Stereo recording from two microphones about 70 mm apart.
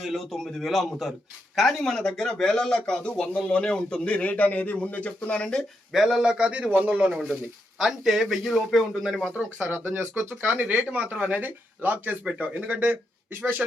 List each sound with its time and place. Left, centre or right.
0.0 s speech: centre
5.9 s a man's voice: centre
7.8 s speech: centre
9.3 s speech: right